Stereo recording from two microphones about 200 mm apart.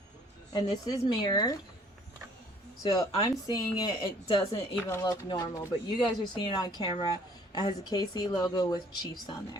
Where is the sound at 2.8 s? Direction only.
20° left (ahead or behind).